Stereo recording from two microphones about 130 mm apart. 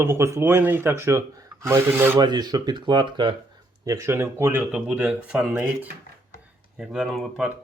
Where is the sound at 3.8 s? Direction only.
25° right (ahead or behind).